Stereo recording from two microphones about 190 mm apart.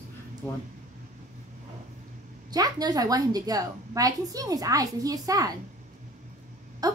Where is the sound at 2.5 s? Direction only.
20° right (ahead or behind).